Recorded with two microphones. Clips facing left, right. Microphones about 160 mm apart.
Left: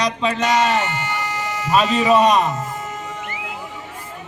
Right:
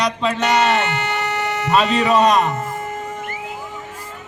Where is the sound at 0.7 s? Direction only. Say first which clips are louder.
Right 2 dB; 70° right (ahead or behind).